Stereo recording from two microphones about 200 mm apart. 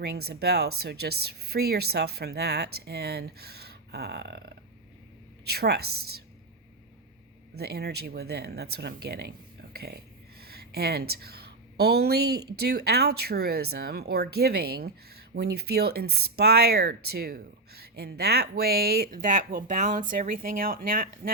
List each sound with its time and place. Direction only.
0.0 s speech: 55° right (ahead or behind)
7.5 s a woman's voice: 50° right (ahead or behind)